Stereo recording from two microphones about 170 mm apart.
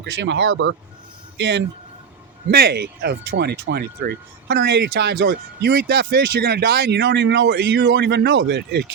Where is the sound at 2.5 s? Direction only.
65° right (ahead or behind).